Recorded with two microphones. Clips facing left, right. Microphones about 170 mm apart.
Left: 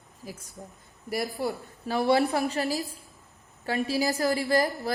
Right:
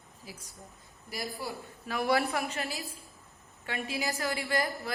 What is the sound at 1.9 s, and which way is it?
A woman's voice, 30° left (ahead or behind).